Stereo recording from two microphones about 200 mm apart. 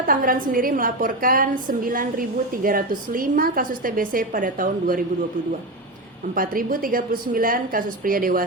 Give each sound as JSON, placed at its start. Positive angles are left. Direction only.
{"t": 0.0, "sound": "a woman's voice", "side_deg": -45}
{"t": 6.3, "sound": "a woman's voice", "side_deg": -45}